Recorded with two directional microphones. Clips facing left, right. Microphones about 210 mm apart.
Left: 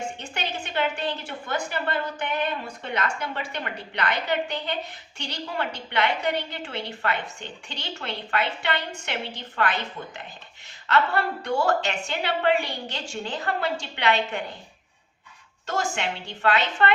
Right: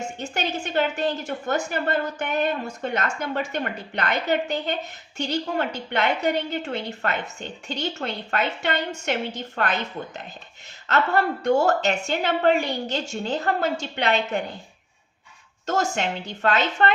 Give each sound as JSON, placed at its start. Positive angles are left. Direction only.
{"t": 0.2, "sound": "a woman's voice", "side_deg": -45}
{"t": 11.4, "sound": "a woman's voice", "side_deg": -40}
{"t": 15.6, "sound": "a woman's voice", "side_deg": -40}